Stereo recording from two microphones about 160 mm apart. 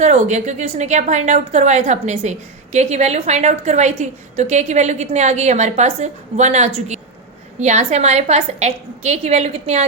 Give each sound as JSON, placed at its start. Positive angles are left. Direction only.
{"t": 0.0, "sound": "a woman's voice", "side_deg": -45}